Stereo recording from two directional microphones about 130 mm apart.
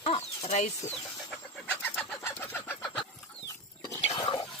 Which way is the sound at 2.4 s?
15° left (ahead or behind).